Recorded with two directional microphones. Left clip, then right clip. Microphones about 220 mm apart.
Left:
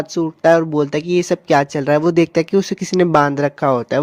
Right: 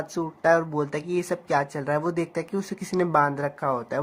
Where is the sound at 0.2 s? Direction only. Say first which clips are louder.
Left 8 dB; 30° left (ahead or behind).